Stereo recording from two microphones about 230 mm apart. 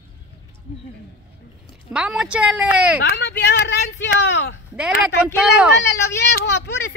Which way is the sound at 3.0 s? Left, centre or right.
Left.